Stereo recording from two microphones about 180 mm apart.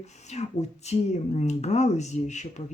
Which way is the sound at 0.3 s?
40° left (ahead or behind).